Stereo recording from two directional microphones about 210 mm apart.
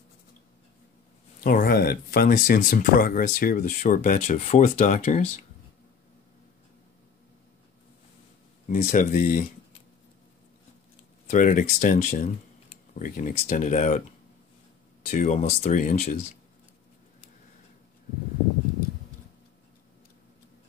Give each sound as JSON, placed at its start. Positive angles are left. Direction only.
{"t": 1.4, "sound": "speech", "side_deg": 45}
{"t": 8.6, "sound": "speech", "side_deg": 35}
{"t": 11.2, "sound": "speech", "side_deg": 40}
{"t": 15.0, "sound": "speech", "side_deg": 35}